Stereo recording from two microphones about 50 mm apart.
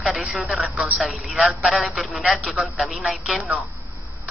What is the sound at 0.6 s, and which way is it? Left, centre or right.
Speech, right.